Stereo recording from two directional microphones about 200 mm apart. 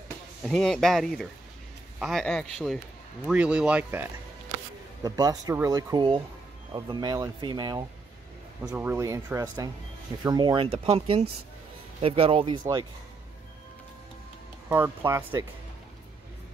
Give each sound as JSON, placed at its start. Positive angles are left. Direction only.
{"t": 0.5, "sound": "a man's voice", "side_deg": 0}
{"t": 5.0, "sound": "speech", "side_deg": -20}
{"t": 8.6, "sound": "speech", "side_deg": -10}
{"t": 14.7, "sound": "speech", "side_deg": -10}